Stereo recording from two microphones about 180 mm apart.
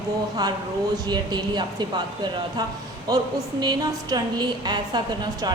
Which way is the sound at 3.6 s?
20° right (ahead or behind).